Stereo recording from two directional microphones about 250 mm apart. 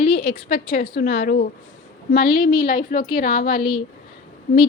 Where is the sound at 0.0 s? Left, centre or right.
Left.